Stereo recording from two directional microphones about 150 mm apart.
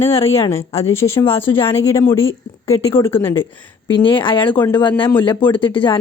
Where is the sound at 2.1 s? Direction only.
40° left (ahead or behind).